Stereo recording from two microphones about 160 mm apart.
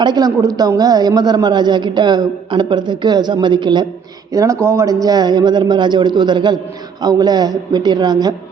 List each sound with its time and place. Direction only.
0.0 s speech: 25° right (ahead or behind)